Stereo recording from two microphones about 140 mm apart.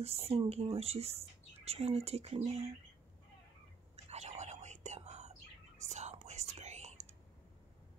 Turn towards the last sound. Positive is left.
turn(degrees=-50)  # may be behind; listen again after turning